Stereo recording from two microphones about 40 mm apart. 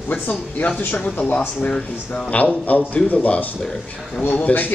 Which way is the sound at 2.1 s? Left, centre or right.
Left.